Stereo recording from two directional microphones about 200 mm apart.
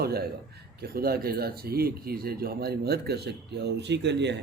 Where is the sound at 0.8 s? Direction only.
50° right (ahead or behind).